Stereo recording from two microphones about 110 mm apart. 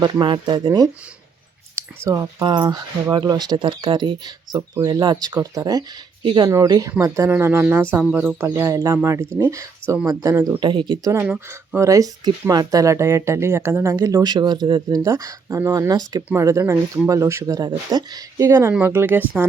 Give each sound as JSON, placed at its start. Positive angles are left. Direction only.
{"t": 0.0, "sound": "speech", "side_deg": -45}
{"t": 1.7, "sound": "a sound", "side_deg": -25}
{"t": 2.4, "sound": "speech", "side_deg": -40}
{"t": 4.5, "sound": "speech", "side_deg": -25}
{"t": 4.9, "sound": "speech", "side_deg": -40}
{"t": 6.2, "sound": "speech", "side_deg": -45}
{"t": 7.3, "sound": "speech", "side_deg": -20}
{"t": 10.6, "sound": "speech", "side_deg": -45}
{"t": 11.2, "sound": "speech", "side_deg": -20}